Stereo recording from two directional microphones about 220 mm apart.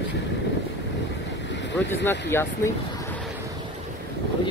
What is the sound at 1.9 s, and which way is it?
Speech, 10° left (ahead or behind).